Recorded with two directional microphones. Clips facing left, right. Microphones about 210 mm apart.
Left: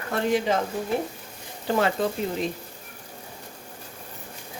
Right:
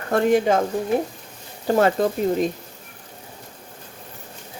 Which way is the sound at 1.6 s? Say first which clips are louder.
Right 5 dB; 45° right (ahead or behind).